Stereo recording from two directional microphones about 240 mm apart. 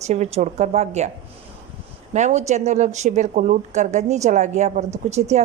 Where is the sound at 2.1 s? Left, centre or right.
Right.